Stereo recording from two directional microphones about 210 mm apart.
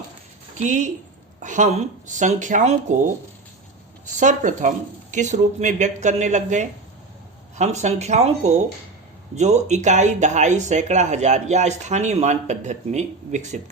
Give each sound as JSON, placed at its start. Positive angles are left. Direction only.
{"t": 0.6, "sound": "speech", "side_deg": -35}
{"t": 4.2, "sound": "speech", "side_deg": -35}